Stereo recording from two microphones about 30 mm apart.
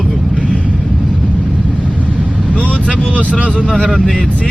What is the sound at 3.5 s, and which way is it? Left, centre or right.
Speech, left.